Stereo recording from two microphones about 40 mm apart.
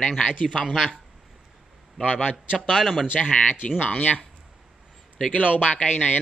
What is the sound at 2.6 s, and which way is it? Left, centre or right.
Speech, centre.